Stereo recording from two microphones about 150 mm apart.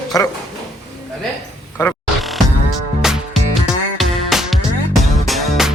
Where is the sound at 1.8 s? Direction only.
15° left (ahead or behind).